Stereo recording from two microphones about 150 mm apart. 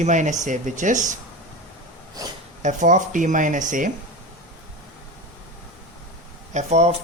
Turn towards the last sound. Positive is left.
turn(degrees=-50)  # may be behind; listen again after turning